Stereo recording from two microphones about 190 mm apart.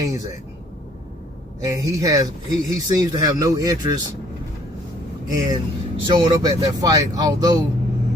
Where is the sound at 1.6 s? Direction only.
20° right (ahead or behind).